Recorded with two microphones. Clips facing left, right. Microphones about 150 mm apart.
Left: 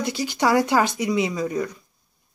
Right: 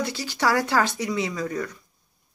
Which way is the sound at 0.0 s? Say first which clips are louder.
Left 3 dB; 15° left (ahead or behind).